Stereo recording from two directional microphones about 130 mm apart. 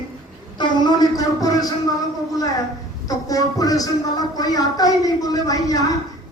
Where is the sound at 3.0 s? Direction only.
30° left (ahead or behind).